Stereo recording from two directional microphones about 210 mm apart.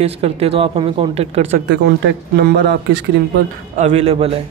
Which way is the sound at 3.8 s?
30° right (ahead or behind).